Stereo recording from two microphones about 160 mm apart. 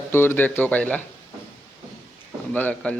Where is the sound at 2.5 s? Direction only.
10° left (ahead or behind).